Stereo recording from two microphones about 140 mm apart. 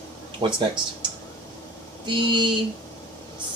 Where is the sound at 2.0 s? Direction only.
35° right (ahead or behind).